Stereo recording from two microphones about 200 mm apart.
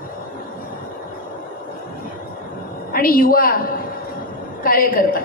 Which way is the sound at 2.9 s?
45° left (ahead or behind).